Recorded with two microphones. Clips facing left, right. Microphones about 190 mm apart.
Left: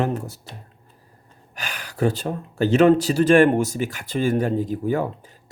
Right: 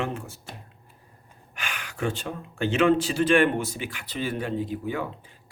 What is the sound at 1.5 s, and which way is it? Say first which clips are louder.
Speech: left 6 dB; 40° left (ahead or behind).